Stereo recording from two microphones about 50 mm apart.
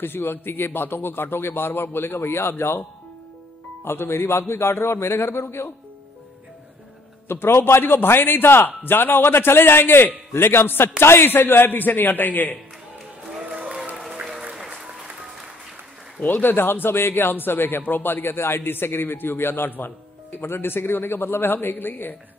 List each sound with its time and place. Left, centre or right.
0.0 s a man's voice: left
3.8 s a man's voice: left
7.2 s a man's voice: left
13.4 s applause: right
14.5 s applause: centre
16.2 s a man's voice: left